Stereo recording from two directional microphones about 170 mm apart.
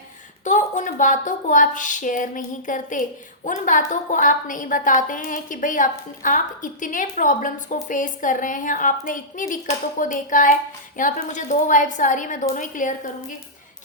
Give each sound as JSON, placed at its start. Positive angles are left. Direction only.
{"t": 0.4, "sound": "a woman's voice", "side_deg": 45}